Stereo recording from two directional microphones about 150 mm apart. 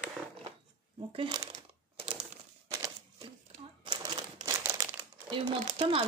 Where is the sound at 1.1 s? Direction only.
35° right (ahead or behind).